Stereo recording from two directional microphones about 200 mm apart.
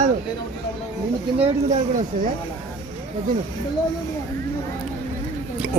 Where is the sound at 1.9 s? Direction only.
40° right (ahead or behind).